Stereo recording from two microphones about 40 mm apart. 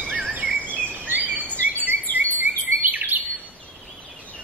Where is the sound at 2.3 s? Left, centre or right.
Right.